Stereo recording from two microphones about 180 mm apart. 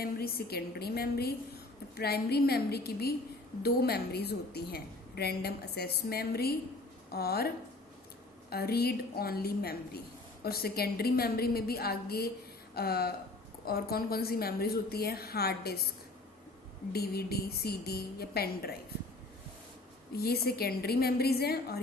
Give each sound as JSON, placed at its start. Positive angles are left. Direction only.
{"t": 0.0, "sound": "a woman's voice", "side_deg": 55}
{"t": 16.9, "sound": "a woman's voice", "side_deg": 60}
{"t": 20.1, "sound": "a woman's voice", "side_deg": 60}